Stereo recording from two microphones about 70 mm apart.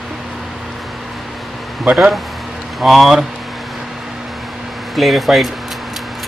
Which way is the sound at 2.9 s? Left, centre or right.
Centre.